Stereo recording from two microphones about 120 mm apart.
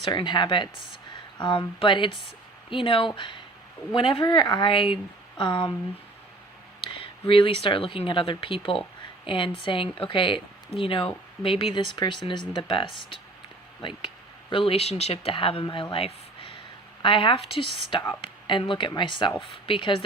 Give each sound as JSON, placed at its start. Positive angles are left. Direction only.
{"t": 0.0, "sound": "speech", "side_deg": 40}
{"t": 7.0, "sound": "speech", "side_deg": 45}
{"t": 14.5, "sound": "speech", "side_deg": 50}